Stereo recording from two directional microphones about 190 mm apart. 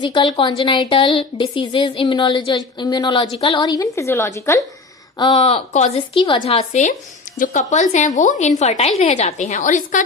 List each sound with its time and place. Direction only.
0.0 s a woman's voice: 25° left (ahead or behind)
5.1 s a woman's voice: 25° left (ahead or behind); by 10.0 s 45° left (ahead or behind)